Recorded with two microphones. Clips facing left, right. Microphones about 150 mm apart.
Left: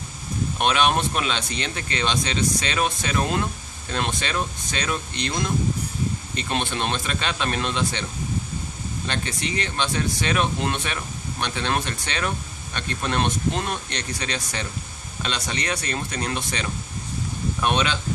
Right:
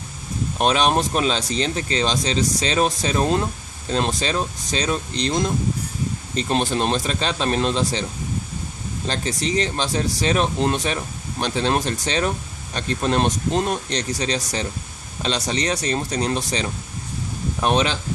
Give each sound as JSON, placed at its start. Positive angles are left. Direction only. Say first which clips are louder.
{"t": 0.6, "sound": "speech", "louder": "right 3 dB", "side_deg": -35}
{"t": 9.0, "sound": "speech", "louder": "right 5 dB", "side_deg": -35}